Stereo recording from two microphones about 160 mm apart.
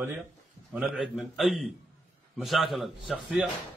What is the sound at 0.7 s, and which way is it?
A man's voice, 5° right (ahead or behind).